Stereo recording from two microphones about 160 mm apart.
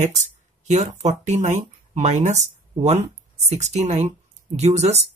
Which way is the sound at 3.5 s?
45° right (ahead or behind).